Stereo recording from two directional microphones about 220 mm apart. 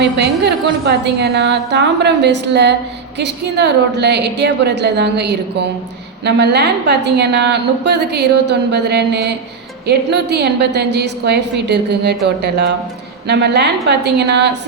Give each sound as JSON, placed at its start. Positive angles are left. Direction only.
{"t": 0.0, "sound": "a woman's voice", "side_deg": -50}